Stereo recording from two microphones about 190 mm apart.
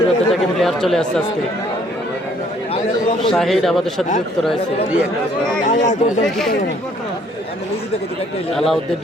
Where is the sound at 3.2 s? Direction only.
Centre (ahead or behind).